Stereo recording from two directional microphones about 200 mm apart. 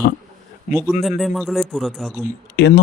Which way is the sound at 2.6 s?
55° left (ahead or behind).